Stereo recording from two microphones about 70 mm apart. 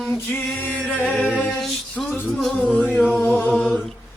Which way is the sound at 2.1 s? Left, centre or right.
Centre.